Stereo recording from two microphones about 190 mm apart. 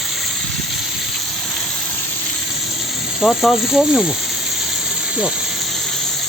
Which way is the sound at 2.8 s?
Centre (ahead or behind).